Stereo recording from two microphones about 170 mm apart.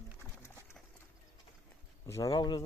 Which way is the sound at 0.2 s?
15° left (ahead or behind).